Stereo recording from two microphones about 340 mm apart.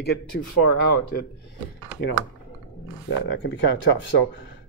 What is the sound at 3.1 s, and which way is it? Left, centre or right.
Speech, left.